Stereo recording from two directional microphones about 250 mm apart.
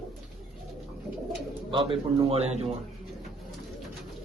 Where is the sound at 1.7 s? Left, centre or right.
Right.